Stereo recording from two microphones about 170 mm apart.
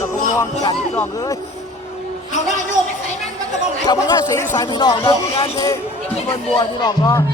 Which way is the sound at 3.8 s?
20° left (ahead or behind).